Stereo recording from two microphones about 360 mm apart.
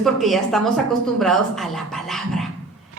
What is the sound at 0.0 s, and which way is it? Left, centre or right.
A woman's voice, centre.